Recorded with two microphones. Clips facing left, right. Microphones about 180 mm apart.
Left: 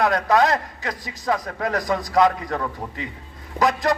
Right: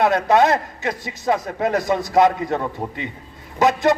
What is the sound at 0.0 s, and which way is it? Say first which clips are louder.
Speech: right 3 dB; 25° right (ahead or behind).